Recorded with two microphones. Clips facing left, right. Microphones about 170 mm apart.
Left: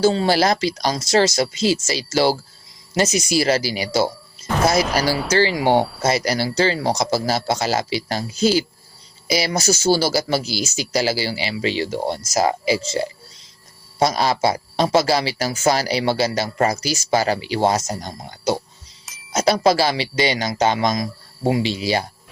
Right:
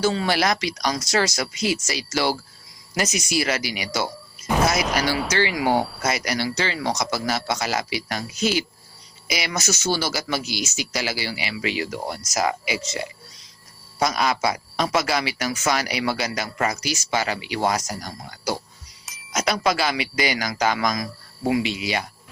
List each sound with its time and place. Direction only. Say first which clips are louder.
0.0 s speech: left 5 dB; 30° left (ahead or behind)
19.3 s music: left 6 dB; 30° left (ahead or behind)
19.6 s speech: left 5 dB; 30° left (ahead or behind)